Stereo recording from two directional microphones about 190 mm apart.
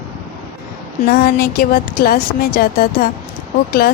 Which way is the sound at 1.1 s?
50° left (ahead or behind).